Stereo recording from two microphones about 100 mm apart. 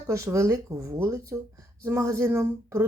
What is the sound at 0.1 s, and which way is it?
Speech, 30° right (ahead or behind).